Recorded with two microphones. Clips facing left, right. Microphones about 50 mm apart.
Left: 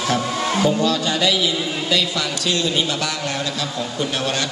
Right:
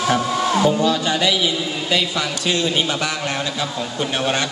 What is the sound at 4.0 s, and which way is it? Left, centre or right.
Speech, centre.